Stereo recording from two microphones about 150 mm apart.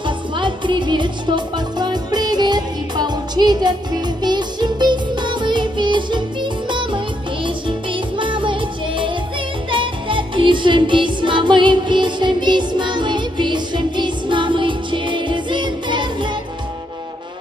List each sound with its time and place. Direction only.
0.0 s music: 30° right (ahead or behind)